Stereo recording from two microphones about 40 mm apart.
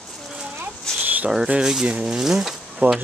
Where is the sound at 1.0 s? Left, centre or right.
Right.